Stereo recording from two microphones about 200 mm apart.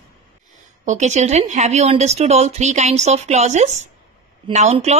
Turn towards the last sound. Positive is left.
turn(degrees=-35)  # may be behind; listen again after turning